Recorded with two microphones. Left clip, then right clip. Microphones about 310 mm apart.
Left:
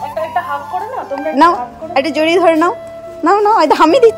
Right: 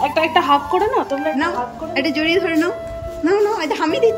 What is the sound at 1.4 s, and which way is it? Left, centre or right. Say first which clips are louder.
Speech: left 10 dB; centre.